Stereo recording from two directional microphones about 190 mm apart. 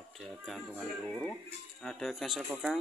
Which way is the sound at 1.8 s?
Centre (ahead or behind).